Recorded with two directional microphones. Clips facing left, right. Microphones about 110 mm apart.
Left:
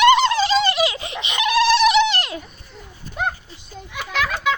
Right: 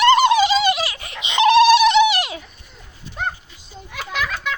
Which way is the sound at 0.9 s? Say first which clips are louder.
Left 6 dB; 20° left (ahead or behind).